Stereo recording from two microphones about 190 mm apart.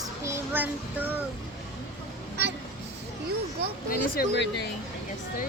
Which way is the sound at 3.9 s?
60° left (ahead or behind).